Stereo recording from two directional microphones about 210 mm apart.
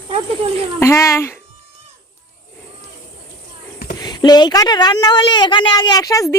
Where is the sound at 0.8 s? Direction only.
15° left (ahead or behind).